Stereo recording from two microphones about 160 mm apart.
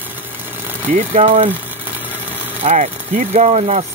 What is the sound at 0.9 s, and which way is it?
Speech, 45° right (ahead or behind).